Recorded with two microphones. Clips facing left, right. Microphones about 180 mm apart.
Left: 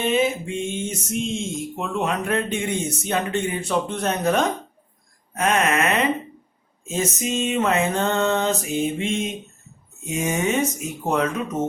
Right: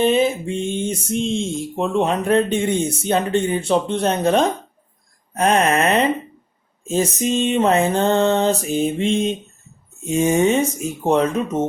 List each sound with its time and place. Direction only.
0.0 s speech: 30° right (ahead or behind)